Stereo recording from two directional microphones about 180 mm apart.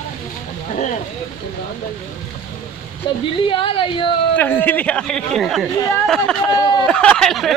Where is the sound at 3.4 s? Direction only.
30° left (ahead or behind).